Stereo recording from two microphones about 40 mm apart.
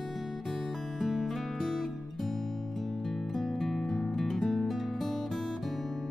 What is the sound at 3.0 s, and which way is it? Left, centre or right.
Music, centre.